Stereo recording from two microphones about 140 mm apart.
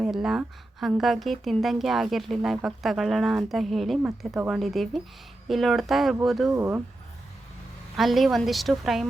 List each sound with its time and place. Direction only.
0.0 s a woman's voice: 5° right (ahead or behind)
6.5 s speech: 15° right (ahead or behind)
7.9 s a woman's voice: centre (ahead or behind)